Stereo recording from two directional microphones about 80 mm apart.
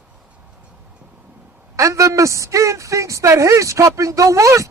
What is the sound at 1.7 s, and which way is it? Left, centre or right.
A woman's voice, right.